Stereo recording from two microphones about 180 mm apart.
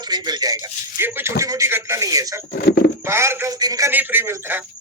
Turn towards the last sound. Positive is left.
turn(degrees=-10)  # may be behind; listen again after turning